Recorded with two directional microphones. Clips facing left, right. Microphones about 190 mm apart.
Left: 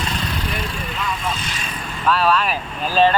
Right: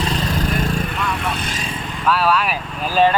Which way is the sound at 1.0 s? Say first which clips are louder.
Right 2 dB; 65° right (ahead or behind).